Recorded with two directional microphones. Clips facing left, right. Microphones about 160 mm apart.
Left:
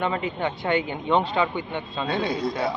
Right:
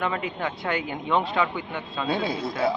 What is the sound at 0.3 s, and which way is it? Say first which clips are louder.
Speech: left 3 dB; 25° left (ahead or behind).